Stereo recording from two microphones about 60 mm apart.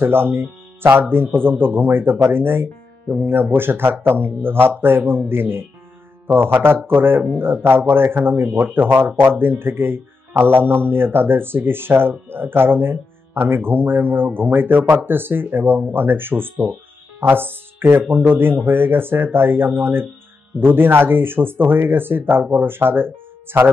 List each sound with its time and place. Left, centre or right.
0.0 s a man's voice: right